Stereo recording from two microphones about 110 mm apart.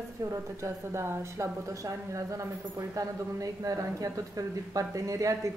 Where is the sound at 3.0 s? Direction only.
30° right (ahead or behind).